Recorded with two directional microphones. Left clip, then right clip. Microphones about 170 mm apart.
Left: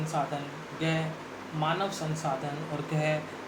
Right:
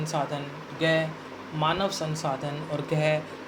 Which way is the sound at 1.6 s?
70° right (ahead or behind).